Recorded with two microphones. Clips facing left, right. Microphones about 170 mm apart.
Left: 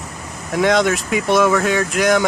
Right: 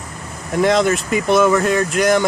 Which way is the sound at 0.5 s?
Centre (ahead or behind).